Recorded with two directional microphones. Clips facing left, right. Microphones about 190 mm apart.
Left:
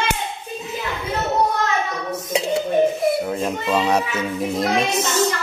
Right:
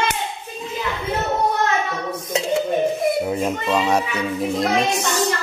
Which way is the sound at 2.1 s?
25° left (ahead or behind).